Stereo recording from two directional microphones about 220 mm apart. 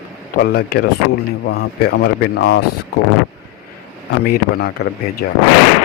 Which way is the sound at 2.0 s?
45° left (ahead or behind).